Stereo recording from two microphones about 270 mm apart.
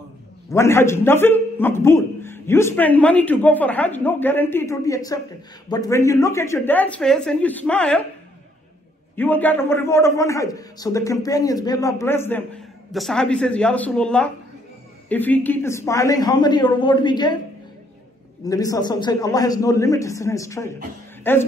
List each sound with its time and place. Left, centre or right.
0.5 s a man's voice: centre
9.1 s a man's voice: centre
18.4 s a man's voice: centre